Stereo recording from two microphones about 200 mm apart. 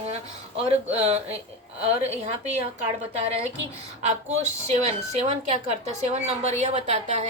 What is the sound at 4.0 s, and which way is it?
Speech, 35° right (ahead or behind).